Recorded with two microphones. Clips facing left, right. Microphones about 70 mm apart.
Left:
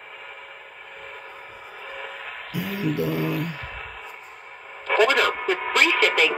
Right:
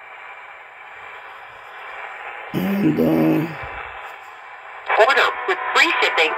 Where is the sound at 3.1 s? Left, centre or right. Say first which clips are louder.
Right 9 dB; right.